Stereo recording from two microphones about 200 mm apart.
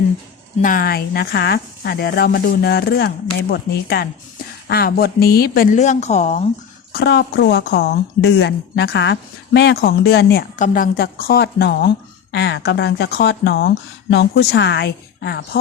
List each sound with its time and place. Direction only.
0.6 s speech: 45° left (ahead or behind)
5.7 s a woman's voice: 35° left (ahead or behind)
6.9 s speech: 55° left (ahead or behind)
10.6 s speech: 45° left (ahead or behind)